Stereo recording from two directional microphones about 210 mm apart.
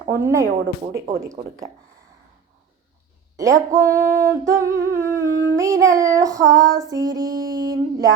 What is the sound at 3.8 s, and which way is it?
Humming, 15° right (ahead or behind).